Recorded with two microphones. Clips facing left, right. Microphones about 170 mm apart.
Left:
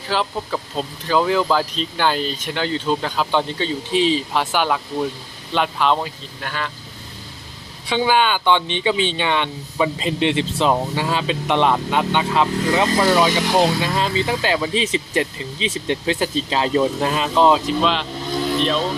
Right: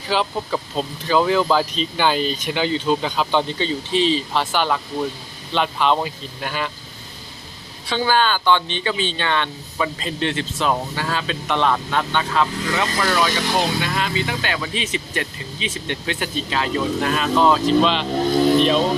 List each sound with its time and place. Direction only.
0.1 s speech: 5° right (ahead or behind)
6.0 s speech: 10° right (ahead or behind)
7.9 s speech: 15° left (ahead or behind)
17.7 s speech: centre (ahead or behind)